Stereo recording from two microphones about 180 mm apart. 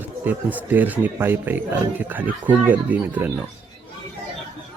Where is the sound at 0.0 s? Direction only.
10° right (ahead or behind).